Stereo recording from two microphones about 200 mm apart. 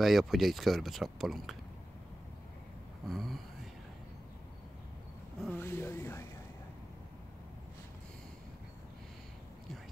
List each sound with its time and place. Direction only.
0.0 s speech: centre (ahead or behind)
3.1 s speech: centre (ahead or behind)
5.5 s a sound: 10° left (ahead or behind)